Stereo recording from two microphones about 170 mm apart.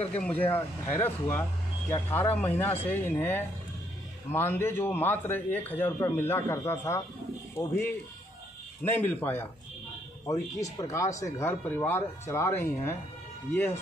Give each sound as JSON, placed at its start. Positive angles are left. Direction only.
{"t": 0.5, "sound": "a man's voice", "side_deg": 15}
{"t": 8.9, "sound": "a man's voice", "side_deg": 10}